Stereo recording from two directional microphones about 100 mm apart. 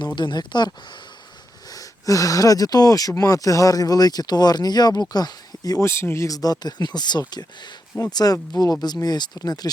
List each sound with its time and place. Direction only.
0.2 s speech: 50° left (ahead or behind)
1.6 s speech: 35° left (ahead or behind)
5.8 s speech: 25° left (ahead or behind)